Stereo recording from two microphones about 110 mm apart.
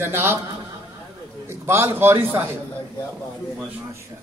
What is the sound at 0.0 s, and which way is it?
Speech, 20° right (ahead or behind).